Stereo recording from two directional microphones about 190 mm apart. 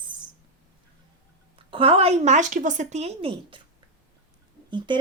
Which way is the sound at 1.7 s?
30° right (ahead or behind).